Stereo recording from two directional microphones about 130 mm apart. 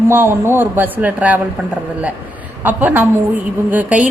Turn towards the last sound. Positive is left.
turn(degrees=-10)  # may be behind; listen again after turning